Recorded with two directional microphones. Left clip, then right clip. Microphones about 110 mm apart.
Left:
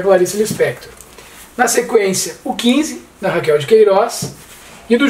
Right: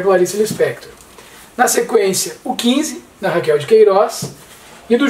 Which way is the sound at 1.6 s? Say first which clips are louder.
Even; 15° right (ahead or behind).